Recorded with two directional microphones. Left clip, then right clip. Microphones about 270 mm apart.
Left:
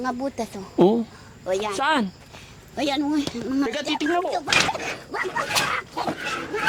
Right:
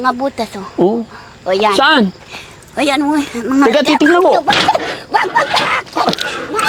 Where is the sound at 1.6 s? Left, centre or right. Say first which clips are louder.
Right 13 dB; right.